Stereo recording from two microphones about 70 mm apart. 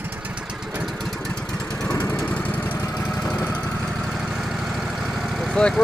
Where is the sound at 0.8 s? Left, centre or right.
Centre.